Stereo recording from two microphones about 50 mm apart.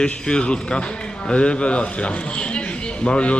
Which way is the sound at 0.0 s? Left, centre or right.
Centre.